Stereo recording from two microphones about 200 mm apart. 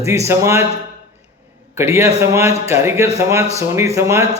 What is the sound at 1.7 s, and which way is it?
A man's voice, 15° right (ahead or behind).